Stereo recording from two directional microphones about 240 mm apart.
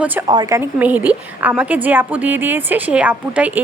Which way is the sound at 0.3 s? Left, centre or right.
Centre.